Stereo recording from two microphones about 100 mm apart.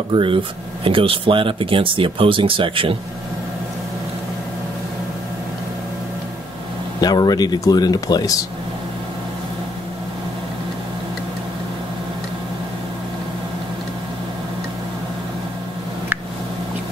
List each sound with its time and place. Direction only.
0.1 s speech: 60° right (ahead or behind)
7.0 s speech: 40° left (ahead or behind)